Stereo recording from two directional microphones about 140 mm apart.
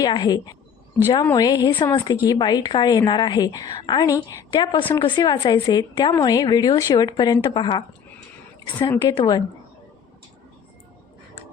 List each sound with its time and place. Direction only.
0.0 s a woman's voice: 30° left (ahead or behind)
9.0 s a woman's voice: 35° left (ahead or behind)